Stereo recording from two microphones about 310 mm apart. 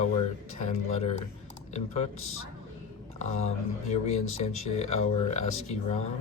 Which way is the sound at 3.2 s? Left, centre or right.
Left.